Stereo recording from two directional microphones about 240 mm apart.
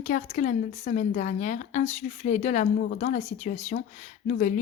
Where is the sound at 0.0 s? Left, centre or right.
Left.